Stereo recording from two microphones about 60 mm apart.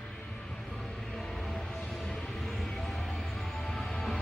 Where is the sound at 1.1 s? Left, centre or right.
Centre.